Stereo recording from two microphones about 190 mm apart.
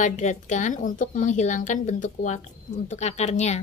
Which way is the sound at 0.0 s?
40° left (ahead or behind).